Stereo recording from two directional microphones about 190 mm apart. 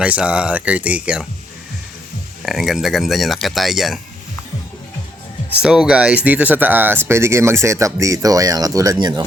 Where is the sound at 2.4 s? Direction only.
Centre (ahead or behind).